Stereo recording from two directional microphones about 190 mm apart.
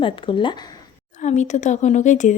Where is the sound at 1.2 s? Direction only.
40° left (ahead or behind).